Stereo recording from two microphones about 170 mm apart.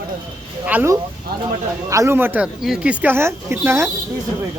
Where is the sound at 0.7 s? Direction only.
10° right (ahead or behind).